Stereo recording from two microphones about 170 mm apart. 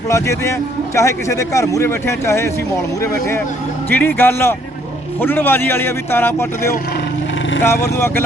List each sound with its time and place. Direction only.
0.1 s speech: 15° left (ahead or behind)
7.6 s speech: 15° left (ahead or behind)